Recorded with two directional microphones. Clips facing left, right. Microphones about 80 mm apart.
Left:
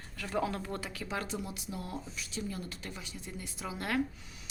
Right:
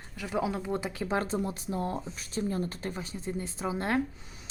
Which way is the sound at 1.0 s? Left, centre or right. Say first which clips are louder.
Right 8 dB; right.